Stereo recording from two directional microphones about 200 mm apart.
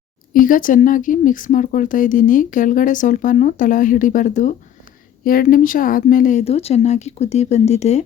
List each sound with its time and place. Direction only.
0.3 s a woman's voice: 45° left (ahead or behind)